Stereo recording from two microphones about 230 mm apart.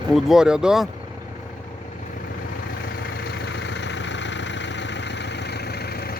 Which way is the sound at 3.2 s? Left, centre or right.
Left.